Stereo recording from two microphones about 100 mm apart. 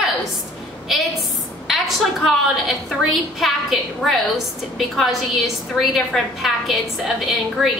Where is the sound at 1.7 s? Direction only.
Centre (ahead or behind).